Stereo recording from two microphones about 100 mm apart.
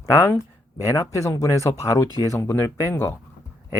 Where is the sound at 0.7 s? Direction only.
35° left (ahead or behind).